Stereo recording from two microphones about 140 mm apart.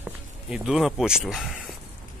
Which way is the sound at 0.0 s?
5° right (ahead or behind).